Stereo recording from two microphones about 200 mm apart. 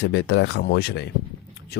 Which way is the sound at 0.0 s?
60° left (ahead or behind).